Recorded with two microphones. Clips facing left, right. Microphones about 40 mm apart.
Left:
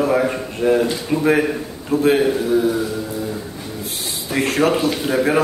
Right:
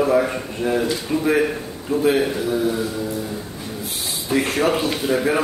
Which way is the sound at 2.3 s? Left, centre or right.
Centre.